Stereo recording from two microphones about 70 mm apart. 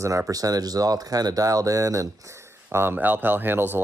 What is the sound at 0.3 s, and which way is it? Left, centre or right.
Speech, right.